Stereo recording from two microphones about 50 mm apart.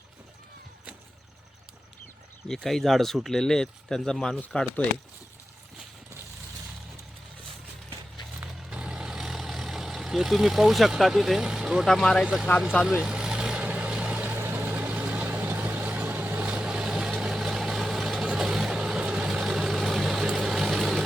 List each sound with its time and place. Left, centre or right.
2.5 s speech: centre
8.7 s vehicle: centre
11.4 s speech: centre
11.9 s speech: centre
12.8 s vehicle: centre
14.3 s vehicle: right
16.5 s vehicle: right; by 21.0 s centre